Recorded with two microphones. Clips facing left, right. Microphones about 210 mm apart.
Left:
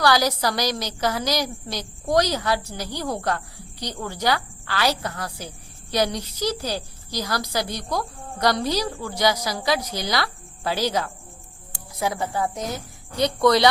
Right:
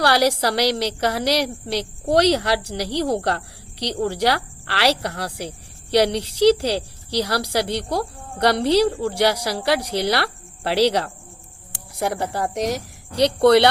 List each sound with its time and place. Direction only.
0.0 s a woman's voice: 65° right (ahead or behind)